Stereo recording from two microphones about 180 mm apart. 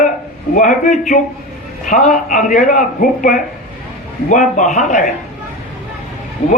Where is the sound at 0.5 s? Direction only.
45° left (ahead or behind).